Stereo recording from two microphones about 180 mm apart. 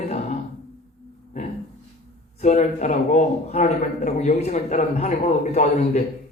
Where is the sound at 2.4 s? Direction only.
40° left (ahead or behind).